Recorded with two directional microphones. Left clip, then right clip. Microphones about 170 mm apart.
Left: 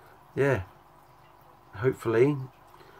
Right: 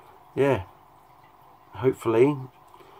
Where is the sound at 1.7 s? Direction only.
15° right (ahead or behind).